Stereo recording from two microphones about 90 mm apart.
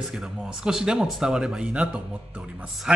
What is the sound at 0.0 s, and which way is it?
A man's voice, 5° right (ahead or behind).